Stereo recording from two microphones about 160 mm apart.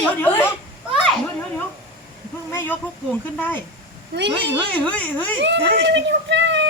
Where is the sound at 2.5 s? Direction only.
10° left (ahead or behind).